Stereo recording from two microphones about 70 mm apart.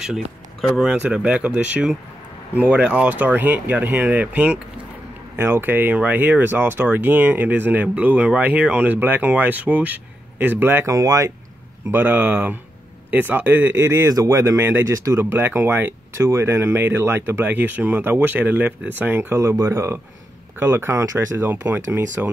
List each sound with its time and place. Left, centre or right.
0.0 s speech: centre
0.8 s speech: centre
5.3 s speech: right
10.9 s speech: right
11.9 s speech: right
13.8 s speech: right
15.1 s speech: right
16.2 s speech: right
19.4 s speech: right
21.5 s speech: right